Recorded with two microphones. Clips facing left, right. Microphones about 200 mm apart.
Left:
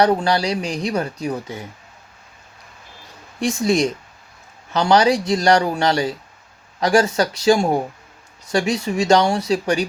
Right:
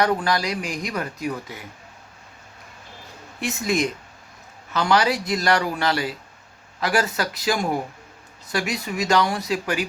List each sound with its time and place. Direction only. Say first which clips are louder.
0.0 s speech: left 5 dB; 30° left (ahead or behind)
3.4 s speech: left 5 dB; 30° left (ahead or behind)